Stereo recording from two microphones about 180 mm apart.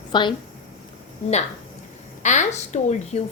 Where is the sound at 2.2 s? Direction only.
40° left (ahead or behind).